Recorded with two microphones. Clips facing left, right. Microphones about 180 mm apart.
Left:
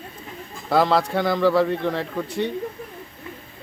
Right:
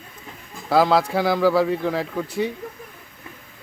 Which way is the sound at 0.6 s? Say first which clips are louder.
Right 1 dB; centre (ahead or behind).